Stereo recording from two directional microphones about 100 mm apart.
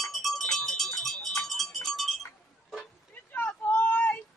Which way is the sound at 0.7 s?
5° left (ahead or behind).